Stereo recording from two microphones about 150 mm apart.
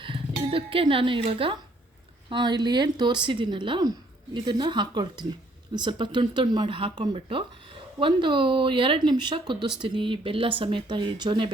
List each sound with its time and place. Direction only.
0.0 s speech: 35° right (ahead or behind)